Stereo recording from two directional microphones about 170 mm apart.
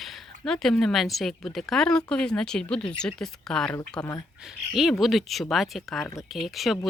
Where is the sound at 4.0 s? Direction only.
25° left (ahead or behind).